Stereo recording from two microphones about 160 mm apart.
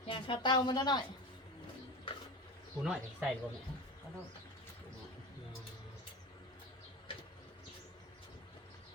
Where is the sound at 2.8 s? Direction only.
5° right (ahead or behind).